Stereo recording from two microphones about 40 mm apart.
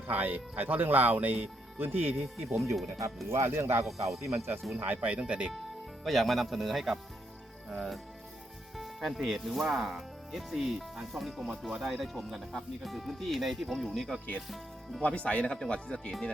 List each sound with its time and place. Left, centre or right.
0.1 s speech: right
1.8 s speech: right
2.6 s speech: centre
3.2 s speech: right
3.8 s speech: centre
4.9 s speech: right
6.1 s speech: centre
8.7 s music: centre
9.1 s speech: centre
11.5 s speech: centre
11.9 s speech: centre
15.0 s speech: left